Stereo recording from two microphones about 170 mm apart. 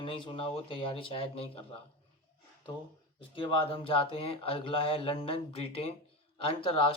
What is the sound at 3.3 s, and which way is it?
Speech, 30° left (ahead or behind).